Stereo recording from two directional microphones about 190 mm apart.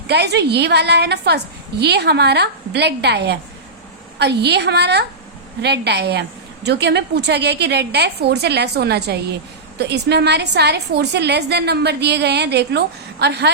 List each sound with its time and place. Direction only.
0.1 s a woman's voice: 60° right (ahead or behind)